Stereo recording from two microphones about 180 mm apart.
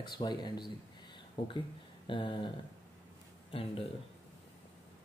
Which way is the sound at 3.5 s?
30° left (ahead or behind).